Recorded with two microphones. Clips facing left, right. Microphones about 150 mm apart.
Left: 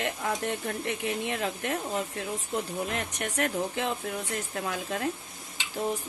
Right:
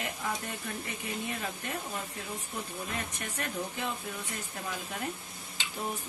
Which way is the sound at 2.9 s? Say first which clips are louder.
Left 6 dB; 80° left.